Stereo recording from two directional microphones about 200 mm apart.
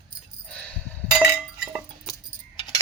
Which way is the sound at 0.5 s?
10° left (ahead or behind).